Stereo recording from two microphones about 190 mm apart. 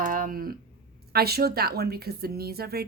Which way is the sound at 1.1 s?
55° right (ahead or behind).